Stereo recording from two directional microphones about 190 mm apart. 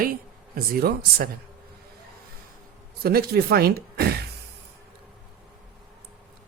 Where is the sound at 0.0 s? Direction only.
50° right (ahead or behind).